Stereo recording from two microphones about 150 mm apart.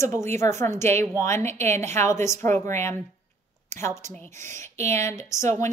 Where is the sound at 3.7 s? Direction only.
20° left (ahead or behind).